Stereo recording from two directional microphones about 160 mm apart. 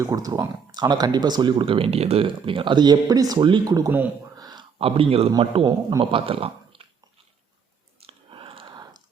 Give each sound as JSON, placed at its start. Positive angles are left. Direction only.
{"t": 0.0, "sound": "speech", "side_deg": -20}
{"t": 4.4, "sound": "a sound", "side_deg": -25}
{"t": 4.8, "sound": "speech", "side_deg": -35}
{"t": 8.0, "sound": "whispering", "side_deg": -35}